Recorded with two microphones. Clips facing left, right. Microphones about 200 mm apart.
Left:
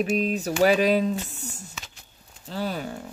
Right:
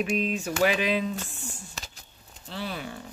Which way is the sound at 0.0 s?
40° left (ahead or behind).